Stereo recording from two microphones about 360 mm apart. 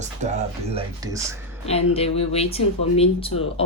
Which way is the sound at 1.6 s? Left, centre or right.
Centre.